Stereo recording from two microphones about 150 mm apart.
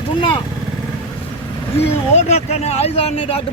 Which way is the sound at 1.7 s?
45° left (ahead or behind).